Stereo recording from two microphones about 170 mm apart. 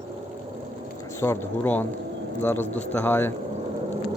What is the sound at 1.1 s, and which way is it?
Speech, 15° left (ahead or behind).